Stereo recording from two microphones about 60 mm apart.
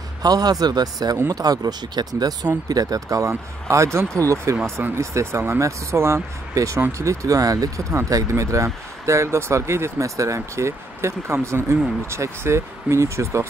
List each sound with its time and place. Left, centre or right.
0.2 s speech: right
3.3 s speech: right
6.5 s speech: right